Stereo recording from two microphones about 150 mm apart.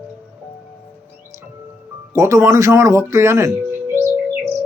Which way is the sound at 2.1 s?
20° right (ahead or behind).